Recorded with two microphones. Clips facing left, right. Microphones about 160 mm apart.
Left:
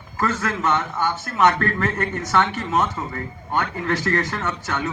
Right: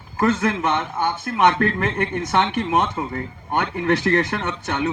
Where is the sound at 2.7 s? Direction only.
30° right (ahead or behind).